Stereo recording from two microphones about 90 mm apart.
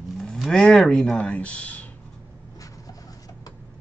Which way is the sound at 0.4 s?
5° left (ahead or behind).